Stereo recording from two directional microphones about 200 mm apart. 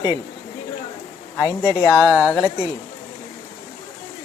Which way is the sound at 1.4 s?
20° left (ahead or behind).